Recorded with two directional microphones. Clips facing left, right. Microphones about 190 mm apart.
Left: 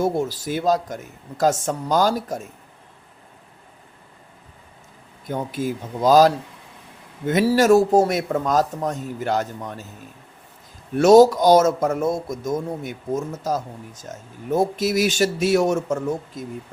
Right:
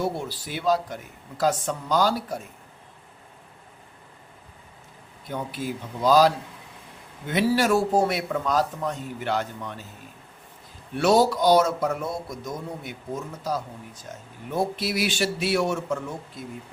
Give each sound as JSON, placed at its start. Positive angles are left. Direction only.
{"t": 0.0, "sound": "speech", "side_deg": 45}
{"t": 5.3, "sound": "speech", "side_deg": 45}
{"t": 10.9, "sound": "speech", "side_deg": 45}